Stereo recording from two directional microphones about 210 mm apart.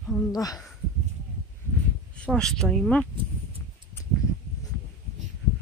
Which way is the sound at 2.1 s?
5° left (ahead or behind).